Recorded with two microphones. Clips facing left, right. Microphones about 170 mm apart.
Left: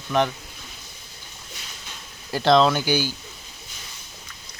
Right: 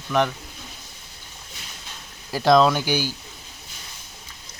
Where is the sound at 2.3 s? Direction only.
5° right (ahead or behind).